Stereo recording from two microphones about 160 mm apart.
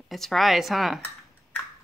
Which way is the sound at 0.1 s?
Centre (ahead or behind).